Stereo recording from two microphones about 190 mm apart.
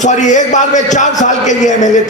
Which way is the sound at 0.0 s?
40° left (ahead or behind).